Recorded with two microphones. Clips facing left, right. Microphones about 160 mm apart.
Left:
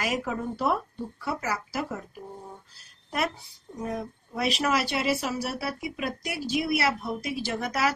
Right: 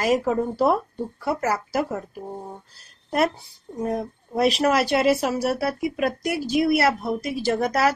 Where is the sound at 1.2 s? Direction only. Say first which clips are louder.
Right 7 dB; 45° right (ahead or behind).